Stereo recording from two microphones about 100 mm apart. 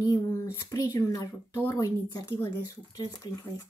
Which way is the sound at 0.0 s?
35° left (ahead or behind).